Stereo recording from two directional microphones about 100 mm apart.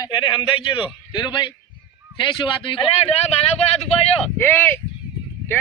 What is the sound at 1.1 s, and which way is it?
A man's voice, 50° left (ahead or behind).